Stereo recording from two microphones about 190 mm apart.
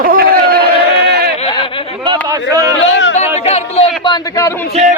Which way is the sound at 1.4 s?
25° left (ahead or behind).